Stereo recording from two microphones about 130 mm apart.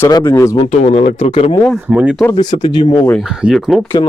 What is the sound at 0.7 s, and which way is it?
Speech, 60° left (ahead or behind).